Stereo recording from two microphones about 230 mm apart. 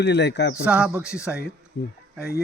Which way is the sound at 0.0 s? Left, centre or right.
Left.